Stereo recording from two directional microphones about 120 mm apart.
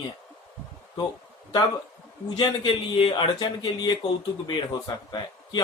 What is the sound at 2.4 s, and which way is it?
A man's voice, 40° left (ahead or behind).